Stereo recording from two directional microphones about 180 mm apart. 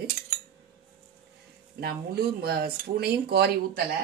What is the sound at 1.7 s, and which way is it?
Speech, 60° right (ahead or behind).